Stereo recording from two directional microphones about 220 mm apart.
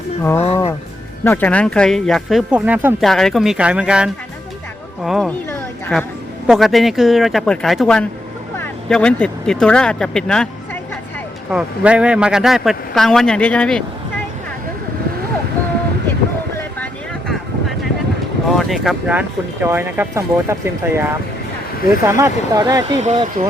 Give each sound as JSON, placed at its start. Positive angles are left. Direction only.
{"t": 0.2, "sound": "speech", "side_deg": 10}
{"t": 0.4, "sound": "speech", "side_deg": 30}
{"t": 1.2, "sound": "speech", "side_deg": 10}
{"t": 5.5, "sound": "a sound", "side_deg": 10}
{"t": 6.5, "sound": "speech", "side_deg": 0}
{"t": 11.5, "sound": "speech", "side_deg": -5}
{"t": 16.6, "sound": "vehicle", "side_deg": 5}
{"t": 18.4, "sound": "speech", "side_deg": 0}
{"t": 23.0, "sound": "speech", "side_deg": -30}